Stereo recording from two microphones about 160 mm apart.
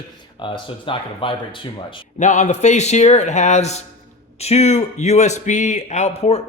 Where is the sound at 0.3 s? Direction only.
30° left (ahead or behind).